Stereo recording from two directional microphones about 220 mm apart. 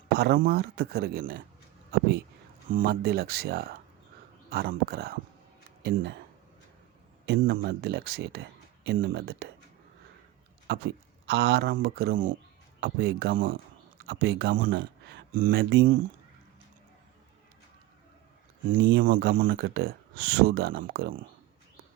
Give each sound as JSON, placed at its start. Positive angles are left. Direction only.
{"t": 0.1, "sound": "speech", "side_deg": -45}
{"t": 2.6, "sound": "speech", "side_deg": -40}
{"t": 7.3, "sound": "speech", "side_deg": -45}
{"t": 10.7, "sound": "speech", "side_deg": -50}
{"t": 18.8, "sound": "speech", "side_deg": -55}
{"t": 19.0, "sound": "speech", "side_deg": -40}